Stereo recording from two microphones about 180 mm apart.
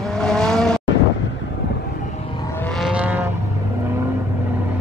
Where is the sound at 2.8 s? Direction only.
10° right (ahead or behind).